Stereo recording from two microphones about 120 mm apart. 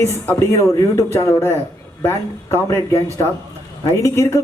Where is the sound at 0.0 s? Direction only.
20° left (ahead or behind).